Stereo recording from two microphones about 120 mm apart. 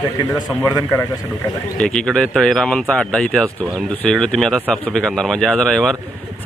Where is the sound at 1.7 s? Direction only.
5° left (ahead or behind).